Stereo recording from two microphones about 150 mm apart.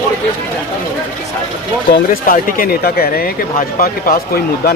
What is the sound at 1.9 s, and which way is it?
Speech, 70° left (ahead or behind).